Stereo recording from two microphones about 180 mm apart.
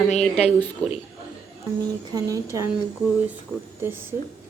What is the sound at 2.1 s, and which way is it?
Speech, 15° right (ahead or behind).